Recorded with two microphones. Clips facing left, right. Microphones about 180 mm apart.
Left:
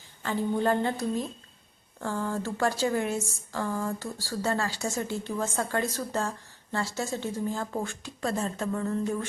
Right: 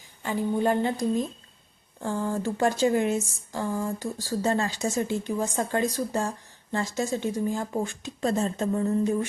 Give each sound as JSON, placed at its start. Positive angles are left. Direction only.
{"t": 0.2, "sound": "speech", "side_deg": -15}